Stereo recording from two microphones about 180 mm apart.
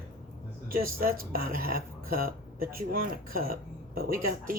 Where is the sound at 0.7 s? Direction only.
55° right (ahead or behind).